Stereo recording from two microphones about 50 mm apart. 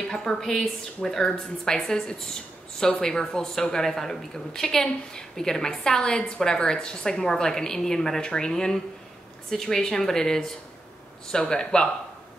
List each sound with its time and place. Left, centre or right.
0.1 s a woman's voice: centre